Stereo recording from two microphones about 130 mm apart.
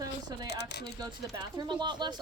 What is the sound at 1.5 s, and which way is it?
Speech, 35° right (ahead or behind).